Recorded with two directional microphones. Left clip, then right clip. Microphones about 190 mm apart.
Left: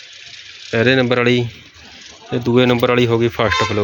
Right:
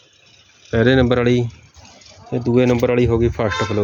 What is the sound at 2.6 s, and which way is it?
Speech, 5° right (ahead or behind).